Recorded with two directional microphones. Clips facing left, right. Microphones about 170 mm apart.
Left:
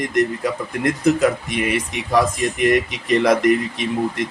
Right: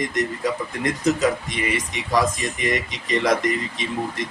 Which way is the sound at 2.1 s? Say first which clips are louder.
Left 3 dB; 60° left (ahead or behind).